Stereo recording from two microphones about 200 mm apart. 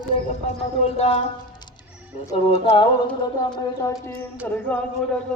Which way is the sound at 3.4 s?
20° left (ahead or behind).